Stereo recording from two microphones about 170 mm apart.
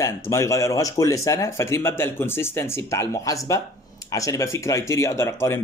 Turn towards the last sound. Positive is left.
turn(degrees=15)  # may be behind; listen again after turning